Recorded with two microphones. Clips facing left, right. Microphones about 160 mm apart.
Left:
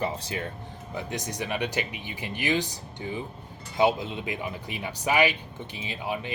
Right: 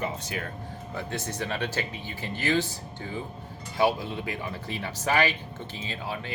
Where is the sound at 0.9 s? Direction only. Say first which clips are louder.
Left 1 dB; 15° left (ahead or behind).